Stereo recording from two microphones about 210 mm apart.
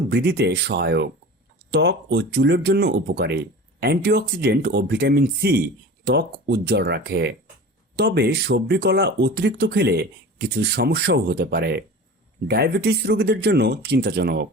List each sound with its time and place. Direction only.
0.1 s speech: 50° right (ahead or behind)